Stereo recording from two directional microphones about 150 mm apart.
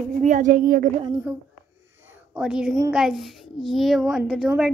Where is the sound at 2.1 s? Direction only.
5° right (ahead or behind).